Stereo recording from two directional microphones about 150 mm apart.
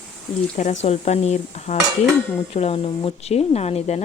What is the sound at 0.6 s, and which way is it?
Dishes, 50° left (ahead or behind).